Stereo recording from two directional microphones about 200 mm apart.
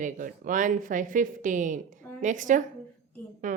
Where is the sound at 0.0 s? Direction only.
40° right (ahead or behind).